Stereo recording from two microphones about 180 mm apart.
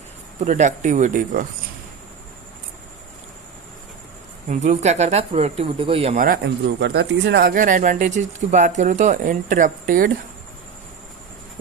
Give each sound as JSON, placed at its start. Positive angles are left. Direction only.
{"t": 0.4, "sound": "speech", "side_deg": -40}
{"t": 4.4, "sound": "speech", "side_deg": -40}
{"t": 6.1, "sound": "speech", "side_deg": -55}
{"t": 6.7, "sound": "speech", "side_deg": -70}